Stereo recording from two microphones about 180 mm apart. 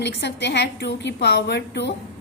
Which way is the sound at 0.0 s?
70° left (ahead or behind).